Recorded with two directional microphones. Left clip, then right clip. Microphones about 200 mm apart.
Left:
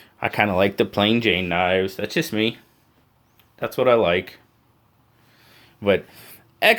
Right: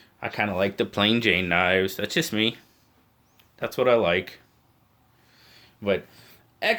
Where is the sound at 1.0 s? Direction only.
15° left (ahead or behind).